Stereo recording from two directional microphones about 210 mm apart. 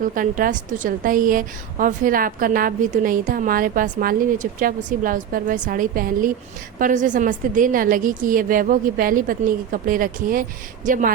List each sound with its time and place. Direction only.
0.0 s a woman's voice: 40° right (ahead or behind)